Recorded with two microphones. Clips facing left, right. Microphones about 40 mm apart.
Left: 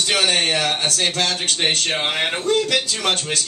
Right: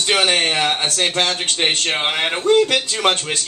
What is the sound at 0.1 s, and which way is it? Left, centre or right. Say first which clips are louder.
Speech: right 3 dB; right.